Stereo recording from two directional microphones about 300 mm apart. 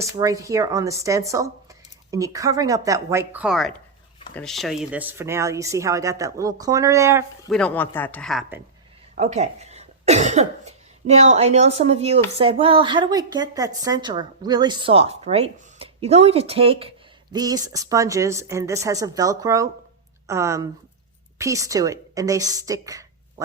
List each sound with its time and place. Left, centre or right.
0.0 s a woman's voice: centre
7.5 s speech: centre
9.1 s a woman's voice: right